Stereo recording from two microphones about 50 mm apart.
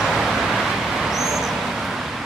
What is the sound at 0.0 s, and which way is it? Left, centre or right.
Vehicle, centre.